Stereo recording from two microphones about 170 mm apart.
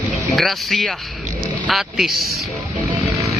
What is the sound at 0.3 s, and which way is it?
Speech, centre (ahead or behind).